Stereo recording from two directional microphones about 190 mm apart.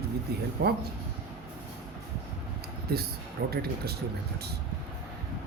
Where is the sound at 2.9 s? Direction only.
55° right (ahead or behind).